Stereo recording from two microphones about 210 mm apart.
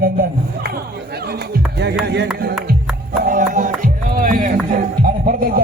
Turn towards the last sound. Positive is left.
turn(degrees=-45)  # may be behind; listen again after turning